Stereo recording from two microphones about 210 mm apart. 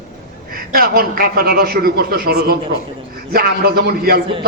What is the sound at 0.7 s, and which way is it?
A man's voice, 45° right (ahead or behind).